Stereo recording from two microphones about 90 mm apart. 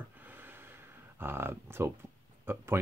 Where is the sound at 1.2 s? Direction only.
25° right (ahead or behind).